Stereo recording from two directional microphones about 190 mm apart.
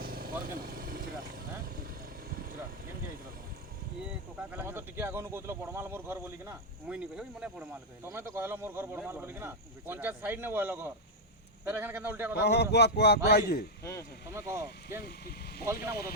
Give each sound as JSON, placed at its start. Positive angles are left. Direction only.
{"t": 0.0, "sound": "vehicle", "side_deg": -50}
{"t": 4.5, "sound": "speech", "side_deg": -10}
{"t": 12.4, "sound": "a man's voice", "side_deg": 60}
{"t": 14.3, "sound": "speech", "side_deg": -15}
{"t": 15.0, "sound": "a man's voice", "side_deg": 55}